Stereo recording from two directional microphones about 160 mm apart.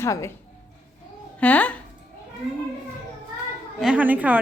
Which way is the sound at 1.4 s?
10° left (ahead or behind).